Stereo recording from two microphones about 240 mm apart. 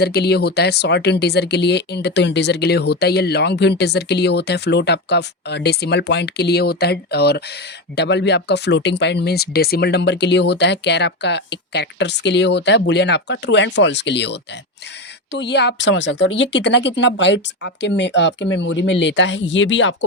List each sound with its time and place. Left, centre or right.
0.0 s speech: left